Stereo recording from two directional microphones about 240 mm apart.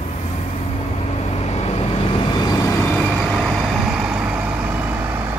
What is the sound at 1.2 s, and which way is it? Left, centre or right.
Vehicle, left.